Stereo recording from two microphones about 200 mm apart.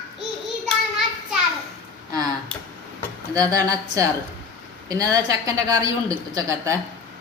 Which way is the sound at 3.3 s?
20° right (ahead or behind).